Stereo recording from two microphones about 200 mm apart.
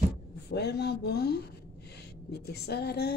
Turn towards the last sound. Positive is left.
turn(degrees=55)  # may be behind; listen again after turning